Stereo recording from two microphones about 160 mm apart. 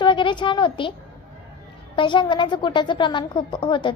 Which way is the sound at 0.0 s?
30° left (ahead or behind).